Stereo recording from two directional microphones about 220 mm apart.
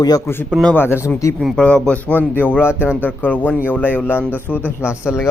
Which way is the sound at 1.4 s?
Centre (ahead or behind).